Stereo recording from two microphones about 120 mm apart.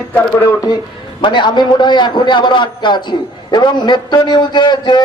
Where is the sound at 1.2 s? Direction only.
40° left (ahead or behind).